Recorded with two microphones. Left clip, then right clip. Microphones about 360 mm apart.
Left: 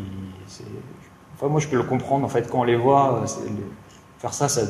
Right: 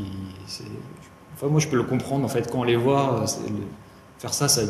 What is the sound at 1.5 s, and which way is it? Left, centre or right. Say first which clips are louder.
A man's voice: left 1 dB; left.